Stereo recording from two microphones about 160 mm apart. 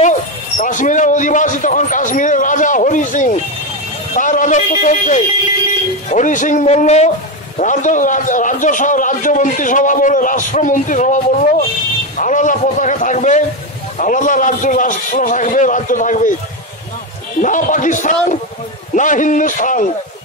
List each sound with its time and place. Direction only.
0.0 s a man's voice: 50° left (ahead or behind)
17.4 s a man's voice: 55° left (ahead or behind)